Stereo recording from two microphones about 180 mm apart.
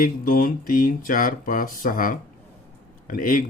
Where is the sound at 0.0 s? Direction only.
50° left (ahead or behind).